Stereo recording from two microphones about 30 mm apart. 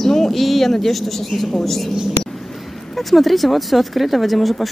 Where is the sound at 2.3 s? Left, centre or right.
Centre.